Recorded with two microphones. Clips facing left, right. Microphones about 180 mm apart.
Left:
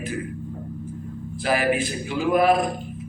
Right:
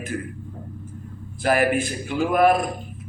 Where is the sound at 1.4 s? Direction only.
50° right (ahead or behind).